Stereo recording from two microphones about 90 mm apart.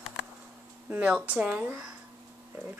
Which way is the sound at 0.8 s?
15° right (ahead or behind).